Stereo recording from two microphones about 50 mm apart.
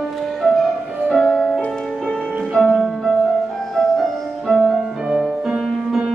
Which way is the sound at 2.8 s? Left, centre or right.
Centre.